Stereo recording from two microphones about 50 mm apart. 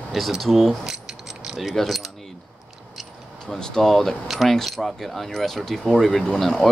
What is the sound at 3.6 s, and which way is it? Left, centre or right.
Speech, centre.